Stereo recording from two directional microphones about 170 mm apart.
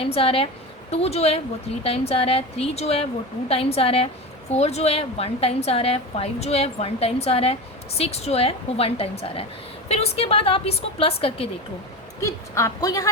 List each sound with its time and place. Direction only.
0.0 s a woman's voice: 35° left (ahead or behind)
12.2 s a woman's voice: 15° left (ahead or behind)